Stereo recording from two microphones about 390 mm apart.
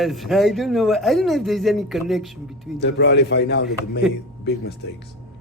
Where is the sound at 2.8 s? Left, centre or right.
Left.